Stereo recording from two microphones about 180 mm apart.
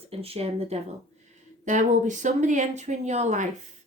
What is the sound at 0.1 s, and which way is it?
Speech, 35° right (ahead or behind).